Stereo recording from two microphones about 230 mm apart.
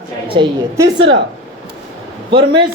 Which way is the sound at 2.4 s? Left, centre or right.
Right.